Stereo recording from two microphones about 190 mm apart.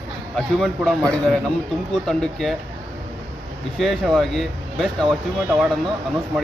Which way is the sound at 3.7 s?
Centre (ahead or behind).